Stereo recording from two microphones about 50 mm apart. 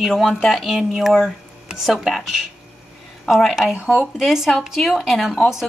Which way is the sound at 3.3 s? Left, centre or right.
Centre.